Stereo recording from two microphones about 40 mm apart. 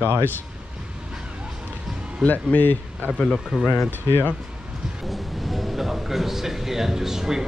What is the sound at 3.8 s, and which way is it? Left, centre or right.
Speech, left.